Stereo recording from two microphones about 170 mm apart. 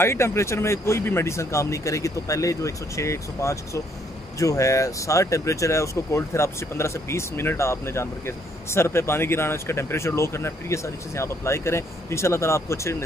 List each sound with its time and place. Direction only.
0.0 s speech: 15° left (ahead or behind)